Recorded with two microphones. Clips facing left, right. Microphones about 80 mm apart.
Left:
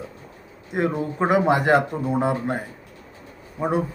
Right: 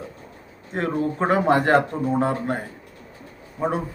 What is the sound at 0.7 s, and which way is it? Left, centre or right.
Speech, centre.